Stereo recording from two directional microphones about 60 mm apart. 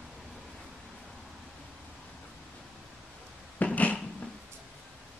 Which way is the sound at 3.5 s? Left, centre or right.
Left.